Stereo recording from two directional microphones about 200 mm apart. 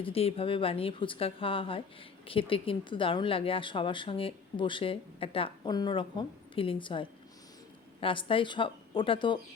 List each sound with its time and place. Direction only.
0.0 s speech: 30° left (ahead or behind)